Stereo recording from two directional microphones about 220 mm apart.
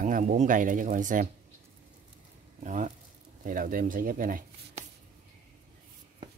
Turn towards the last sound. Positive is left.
turn(degrees=-40)  # may be behind; listen again after turning